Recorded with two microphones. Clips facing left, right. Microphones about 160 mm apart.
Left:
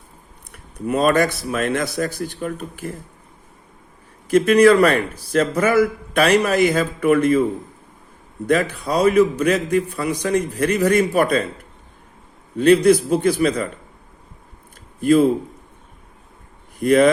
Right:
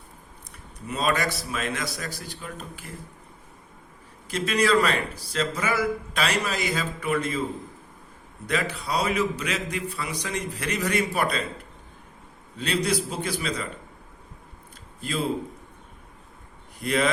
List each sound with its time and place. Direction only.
0.5 s a man's voice: 55° left (ahead or behind)
4.3 s a man's voice: 55° left (ahead or behind)
8.4 s a man's voice: 50° left (ahead or behind)
12.5 s a man's voice: 55° left (ahead or behind)
15.0 s a man's voice: 50° left (ahead or behind)
16.8 s a man's voice: 45° left (ahead or behind)